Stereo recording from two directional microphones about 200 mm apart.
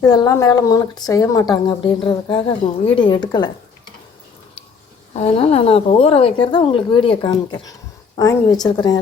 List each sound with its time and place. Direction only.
0.0 s a woman's voice: 15° left (ahead or behind)
5.1 s a woman's voice: 30° left (ahead or behind)